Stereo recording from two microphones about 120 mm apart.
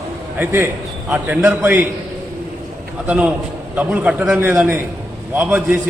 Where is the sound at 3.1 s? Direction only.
10° right (ahead or behind).